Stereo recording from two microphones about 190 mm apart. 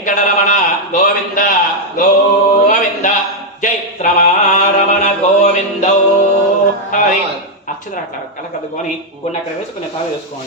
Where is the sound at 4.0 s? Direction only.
35° left (ahead or behind).